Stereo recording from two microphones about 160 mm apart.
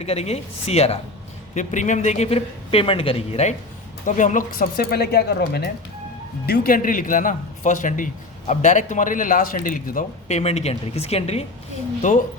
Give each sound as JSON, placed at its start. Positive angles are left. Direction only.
{"t": 0.0, "sound": "a man's voice", "side_deg": 40}
{"t": 4.0, "sound": "speech", "side_deg": 50}
{"t": 6.4, "sound": "a man's voice", "side_deg": 70}
{"t": 10.2, "sound": "a man's voice", "side_deg": 40}
{"t": 12.0, "sound": "speech", "side_deg": 55}